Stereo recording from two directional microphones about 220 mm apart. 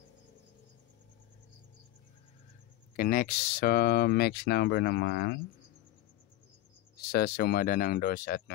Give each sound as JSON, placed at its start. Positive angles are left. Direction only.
{"t": 3.0, "sound": "speech", "side_deg": 40}
{"t": 7.1, "sound": "speech", "side_deg": 45}